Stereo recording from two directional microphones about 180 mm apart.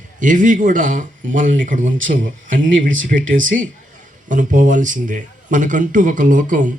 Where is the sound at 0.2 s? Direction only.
45° right (ahead or behind).